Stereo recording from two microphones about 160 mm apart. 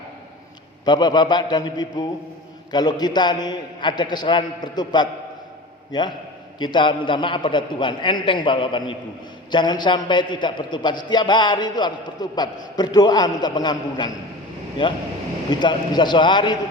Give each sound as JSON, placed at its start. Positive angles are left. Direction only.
{"t": 0.9, "sound": "a man's voice", "side_deg": 25}